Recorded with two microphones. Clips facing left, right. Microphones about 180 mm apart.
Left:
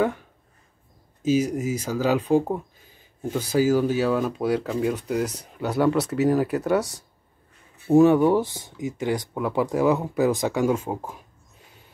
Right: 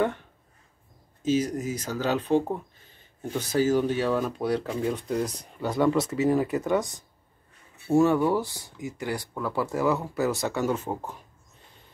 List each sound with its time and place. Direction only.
1.2 s speech: 10° left (ahead or behind)
7.8 s speech: 15° left (ahead or behind)